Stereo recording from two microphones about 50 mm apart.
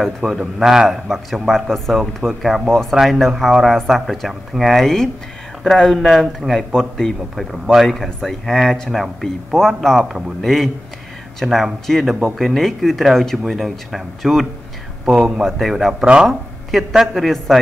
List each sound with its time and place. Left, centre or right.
0.4 s speech: centre
2.7 s a man's voice: centre
15.0 s speech: centre